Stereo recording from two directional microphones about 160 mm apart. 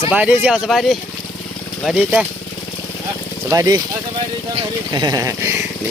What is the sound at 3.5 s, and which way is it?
Speech, 20° right (ahead or behind).